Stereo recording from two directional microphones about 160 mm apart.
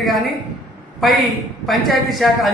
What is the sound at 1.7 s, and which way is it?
Speech, centre (ahead or behind).